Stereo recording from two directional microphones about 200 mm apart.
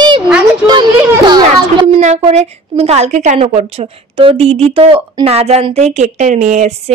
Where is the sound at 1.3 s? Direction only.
25° right (ahead or behind).